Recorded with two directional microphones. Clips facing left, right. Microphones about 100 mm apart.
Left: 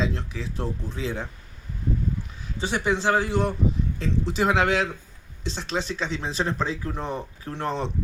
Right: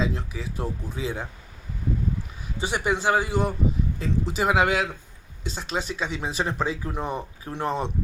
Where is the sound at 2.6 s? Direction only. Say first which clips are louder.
Even; 10° right (ahead or behind).